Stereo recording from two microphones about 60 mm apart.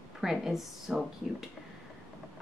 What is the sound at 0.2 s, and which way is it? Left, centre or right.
Speech, centre.